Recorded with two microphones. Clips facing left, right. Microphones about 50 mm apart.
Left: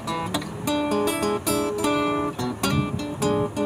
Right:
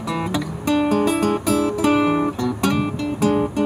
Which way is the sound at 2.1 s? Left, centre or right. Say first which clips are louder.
Right 5 dB; centre.